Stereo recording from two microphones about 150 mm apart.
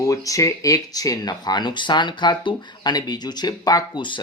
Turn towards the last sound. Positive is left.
turn(degrees=30)  # may be behind; listen again after turning